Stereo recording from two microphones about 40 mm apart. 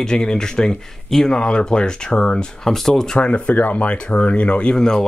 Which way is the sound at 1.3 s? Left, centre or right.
Left.